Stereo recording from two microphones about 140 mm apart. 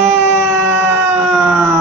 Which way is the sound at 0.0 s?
10° right (ahead or behind).